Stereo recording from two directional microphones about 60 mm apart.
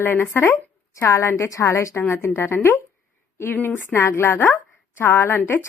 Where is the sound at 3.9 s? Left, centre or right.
Left.